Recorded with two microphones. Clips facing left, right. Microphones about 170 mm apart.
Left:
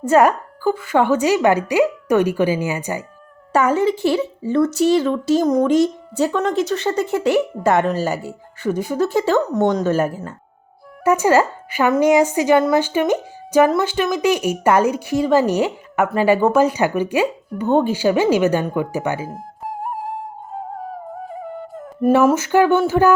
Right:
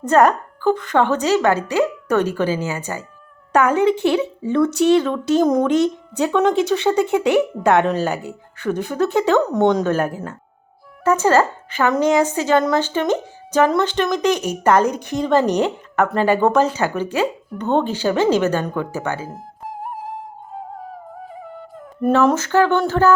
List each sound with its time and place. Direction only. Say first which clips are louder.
0.0 s a woman's voice: even; 10° left (ahead or behind)
11.0 s a woman's voice: left 1 dB; 10° left (ahead or behind)
19.3 s music: left 3 dB; 50° left (ahead or behind)
22.0 s a woman's voice: left 2 dB; 5° left (ahead or behind)